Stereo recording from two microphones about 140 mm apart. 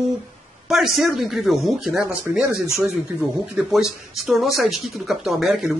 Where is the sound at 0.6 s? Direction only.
Centre (ahead or behind).